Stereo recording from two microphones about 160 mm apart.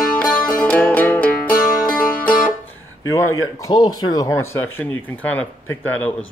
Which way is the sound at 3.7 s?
25° left (ahead or behind).